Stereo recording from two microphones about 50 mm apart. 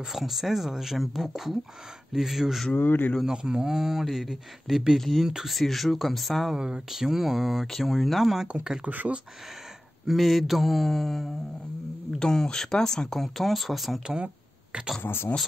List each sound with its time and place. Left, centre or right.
0.1 s speech: centre
2.7 s speech: left
3.3 s speech: centre
5.2 s speech: centre
5.6 s speech: centre
6.5 s speech: centre
8.5 s speech: centre
8.8 s speech: right
10.0 s speech: centre
14.0 s a sound: right
15.0 s speech: left